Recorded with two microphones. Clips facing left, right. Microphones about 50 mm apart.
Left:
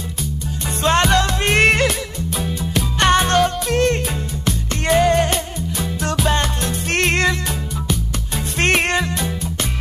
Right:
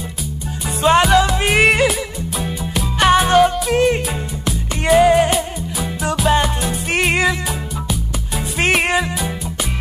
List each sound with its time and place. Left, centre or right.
0.8 s music: centre
8.5 s music: centre